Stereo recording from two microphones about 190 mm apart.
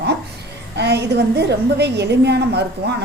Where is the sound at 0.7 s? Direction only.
60° right (ahead or behind).